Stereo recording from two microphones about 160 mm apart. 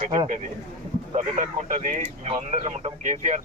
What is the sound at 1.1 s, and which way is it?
Speech, 50° right (ahead or behind).